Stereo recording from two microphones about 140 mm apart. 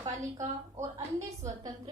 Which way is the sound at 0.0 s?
25° right (ahead or behind).